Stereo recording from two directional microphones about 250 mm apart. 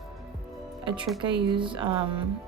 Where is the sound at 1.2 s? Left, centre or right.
Centre.